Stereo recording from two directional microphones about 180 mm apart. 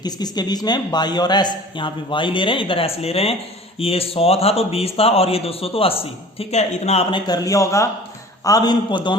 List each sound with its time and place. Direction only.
0.0 s a man's voice: 20° left (ahead or behind)
7.3 s a man's voice: 20° left (ahead or behind)